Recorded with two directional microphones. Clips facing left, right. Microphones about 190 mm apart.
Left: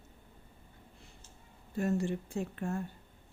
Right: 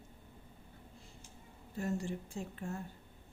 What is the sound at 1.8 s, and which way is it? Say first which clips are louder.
Speech: left 6 dB; 65° left (ahead or behind).